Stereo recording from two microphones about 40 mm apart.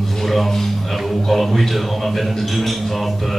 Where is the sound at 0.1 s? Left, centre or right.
Centre.